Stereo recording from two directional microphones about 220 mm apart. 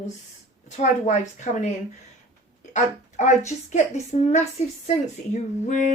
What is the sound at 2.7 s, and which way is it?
A woman's voice, 35° left (ahead or behind).